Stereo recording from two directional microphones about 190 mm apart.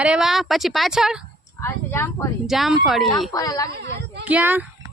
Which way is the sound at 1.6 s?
10° left (ahead or behind).